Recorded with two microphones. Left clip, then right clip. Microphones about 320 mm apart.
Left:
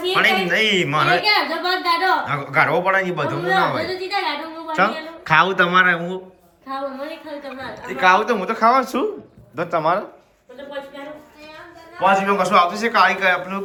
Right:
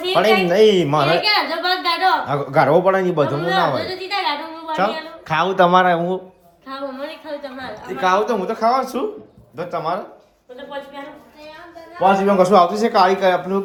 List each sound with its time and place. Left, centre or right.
0.1 s speech: centre
1.1 s a sound: centre
2.2 s a man's voice: centre
3.8 s a woman's voice: centre
6.7 s a woman's voice: centre
12.2 s a man's voice: centre